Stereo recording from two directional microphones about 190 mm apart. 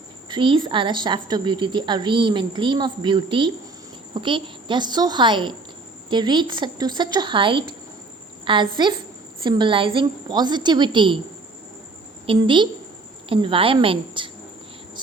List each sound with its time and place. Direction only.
0.3 s a woman's voice: 25° right (ahead or behind)
12.2 s a woman's voice: 25° right (ahead or behind)